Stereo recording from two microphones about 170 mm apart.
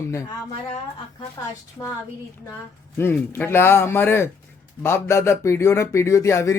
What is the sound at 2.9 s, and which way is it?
Speech, 15° left (ahead or behind).